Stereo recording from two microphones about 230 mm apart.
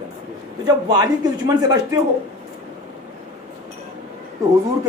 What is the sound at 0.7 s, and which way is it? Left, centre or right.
A man's voice, centre.